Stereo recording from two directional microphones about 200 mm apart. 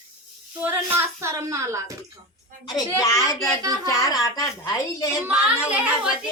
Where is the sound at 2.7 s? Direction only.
20° left (ahead or behind).